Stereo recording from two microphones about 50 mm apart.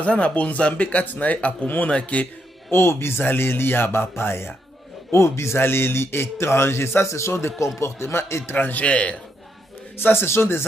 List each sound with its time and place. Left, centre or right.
0.0 s speech: left
2.7 s speech: left
5.1 s a man's voice: left
7.8 s a man's voice: left
8.8 s speech: left
9.9 s a man's voice: left